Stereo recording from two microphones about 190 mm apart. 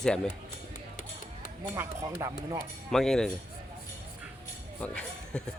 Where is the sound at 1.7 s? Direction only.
15° right (ahead or behind).